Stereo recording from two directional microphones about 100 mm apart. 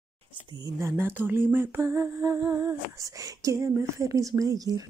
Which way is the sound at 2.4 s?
30° right (ahead or behind).